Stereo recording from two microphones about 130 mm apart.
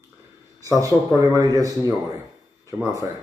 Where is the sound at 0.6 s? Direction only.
25° right (ahead or behind).